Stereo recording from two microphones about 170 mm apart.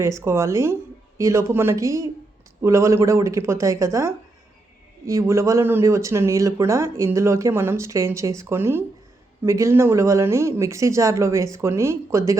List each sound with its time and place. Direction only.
0.0 s speech: 15° right (ahead or behind)